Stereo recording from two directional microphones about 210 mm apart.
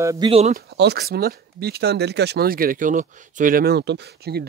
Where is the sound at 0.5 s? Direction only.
50° right (ahead or behind).